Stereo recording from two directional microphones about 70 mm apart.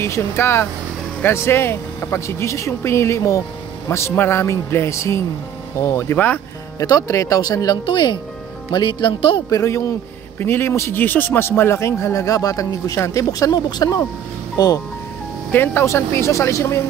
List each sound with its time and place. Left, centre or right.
0.0 s speech: left
6.1 s speech: left
6.9 s speech: left
9.5 s speech: left
10.4 s speech: left
11.0 s speech: left
15.5 s speech: left